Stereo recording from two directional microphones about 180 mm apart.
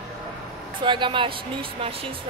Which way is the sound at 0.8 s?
25° right (ahead or behind).